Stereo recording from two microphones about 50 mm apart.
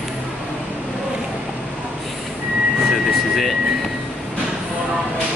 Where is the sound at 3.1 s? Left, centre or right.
Centre.